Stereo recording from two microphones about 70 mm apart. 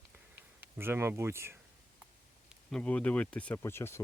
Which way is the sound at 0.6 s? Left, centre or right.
Right.